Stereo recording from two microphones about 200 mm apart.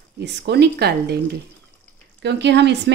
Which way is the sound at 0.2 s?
55° right (ahead or behind).